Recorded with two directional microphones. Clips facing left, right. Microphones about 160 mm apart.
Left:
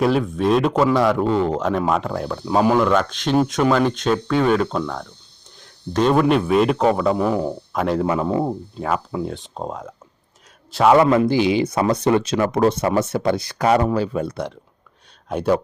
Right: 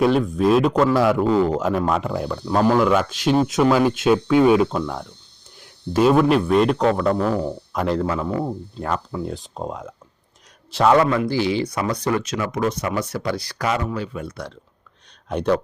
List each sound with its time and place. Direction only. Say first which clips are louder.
0.0 s a man's voice: right 1 dB; centre (ahead or behind)
7.7 s speech: left 1 dB; centre (ahead or behind)
8.0 s speech: left 3 dB; 20° left (ahead or behind)
8.8 s speech: left 2 dB; 5° left (ahead or behind)
10.8 s speech: left 3 dB; 25° left (ahead or behind)
13.7 s speech: left 7 dB; 40° left (ahead or behind)
15.3 s speech: left 1 dB; 5° left (ahead or behind)